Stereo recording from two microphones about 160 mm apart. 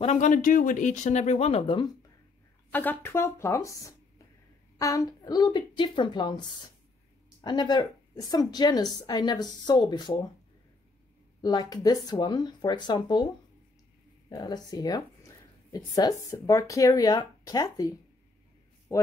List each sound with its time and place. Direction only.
0.0 s speech: 45° left (ahead or behind)
2.7 s speech: 10° left (ahead or behind)
11.4 s speech: 25° left (ahead or behind)
14.3 s speech: 25° left (ahead or behind)